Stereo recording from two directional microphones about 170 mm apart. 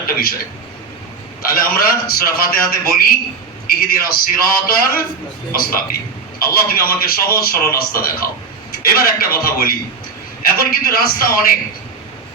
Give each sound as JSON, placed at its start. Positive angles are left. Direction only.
{"t": 1.4, "sound": "a man's voice", "side_deg": 60}